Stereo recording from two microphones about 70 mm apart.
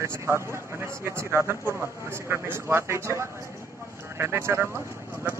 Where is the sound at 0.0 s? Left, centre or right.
Right.